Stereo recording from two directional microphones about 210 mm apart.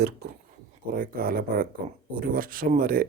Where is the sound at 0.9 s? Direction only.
45° right (ahead or behind).